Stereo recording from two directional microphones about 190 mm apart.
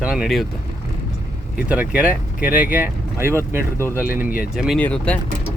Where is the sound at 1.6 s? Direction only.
10° right (ahead or behind).